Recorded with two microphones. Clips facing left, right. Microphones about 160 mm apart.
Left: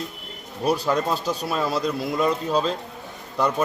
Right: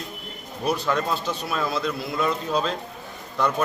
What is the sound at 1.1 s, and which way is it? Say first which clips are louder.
A man's voice: left 2 dB; 40° left (ahead or behind).